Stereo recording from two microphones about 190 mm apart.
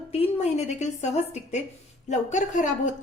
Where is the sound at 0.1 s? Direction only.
30° left (ahead or behind).